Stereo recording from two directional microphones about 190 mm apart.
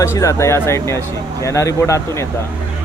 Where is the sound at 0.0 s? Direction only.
15° left (ahead or behind).